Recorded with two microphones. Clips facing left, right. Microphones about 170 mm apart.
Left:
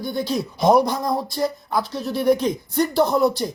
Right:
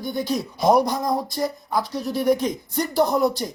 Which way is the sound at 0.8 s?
40° right (ahead or behind).